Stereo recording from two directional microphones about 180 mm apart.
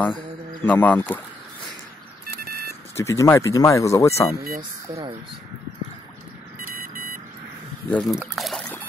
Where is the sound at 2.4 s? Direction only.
55° right (ahead or behind).